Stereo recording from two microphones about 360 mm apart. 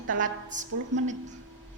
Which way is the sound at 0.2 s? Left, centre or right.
Right.